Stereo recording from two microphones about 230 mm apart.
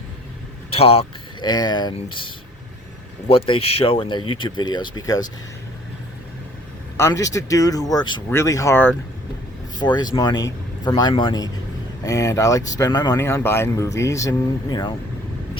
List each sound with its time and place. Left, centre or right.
0.7 s speech: left
6.9 s speech: centre